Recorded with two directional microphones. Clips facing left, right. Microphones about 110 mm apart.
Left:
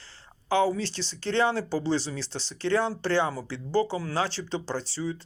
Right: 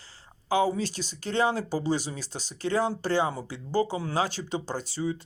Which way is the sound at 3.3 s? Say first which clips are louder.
Left 1 dB; 20° right (ahead or behind).